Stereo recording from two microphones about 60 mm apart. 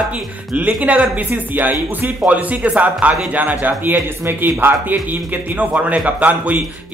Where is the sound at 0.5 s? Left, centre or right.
Right.